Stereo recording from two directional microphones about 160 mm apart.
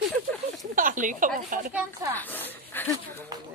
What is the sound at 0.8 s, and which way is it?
Speech, 55° right (ahead or behind).